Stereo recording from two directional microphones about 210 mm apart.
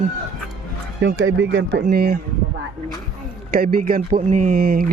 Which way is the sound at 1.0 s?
65° right (ahead or behind).